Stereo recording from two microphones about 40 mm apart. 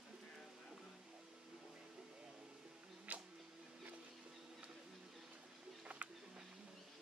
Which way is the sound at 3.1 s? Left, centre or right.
Right.